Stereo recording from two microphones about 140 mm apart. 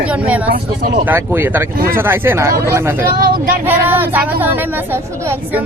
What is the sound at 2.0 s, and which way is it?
A woman's voice, 15° right (ahead or behind).